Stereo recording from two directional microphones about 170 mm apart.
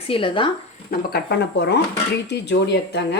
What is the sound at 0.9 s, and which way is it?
A woman's voice, 70° left (ahead or behind).